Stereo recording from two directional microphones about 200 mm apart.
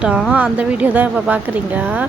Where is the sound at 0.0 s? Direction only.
5° right (ahead or behind).